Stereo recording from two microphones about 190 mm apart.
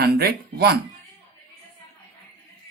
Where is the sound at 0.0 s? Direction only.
55° right (ahead or behind).